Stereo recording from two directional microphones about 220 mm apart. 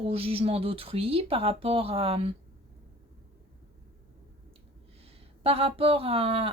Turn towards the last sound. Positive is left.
turn(degrees=-25)  # may be behind; listen again after turning